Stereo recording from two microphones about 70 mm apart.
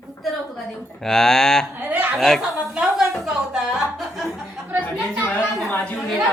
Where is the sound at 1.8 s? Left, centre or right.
Right.